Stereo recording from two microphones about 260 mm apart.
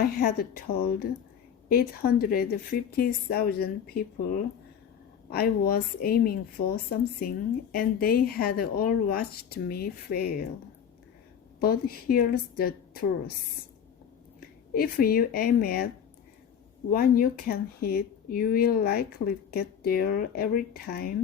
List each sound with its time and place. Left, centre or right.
0.0 s speech: left
5.3 s speech: left
11.6 s speech: left
14.7 s speech: left
16.9 s speech: left